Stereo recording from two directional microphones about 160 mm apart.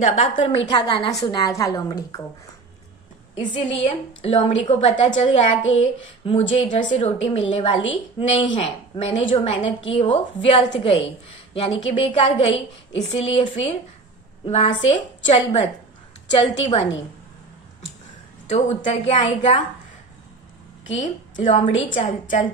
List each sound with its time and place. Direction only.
0.1 s a woman's voice: 40° left (ahead or behind); by 2.2 s 20° left (ahead or behind)
3.3 s a woman's voice: 40° left (ahead or behind)
18.5 s a woman's voice: 40° left (ahead or behind)
20.9 s a woman's voice: 40° left (ahead or behind)